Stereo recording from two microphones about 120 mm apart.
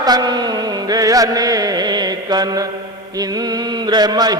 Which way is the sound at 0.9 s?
30° right (ahead or behind).